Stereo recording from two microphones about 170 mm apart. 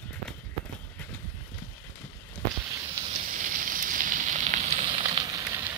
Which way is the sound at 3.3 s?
50° right (ahead or behind).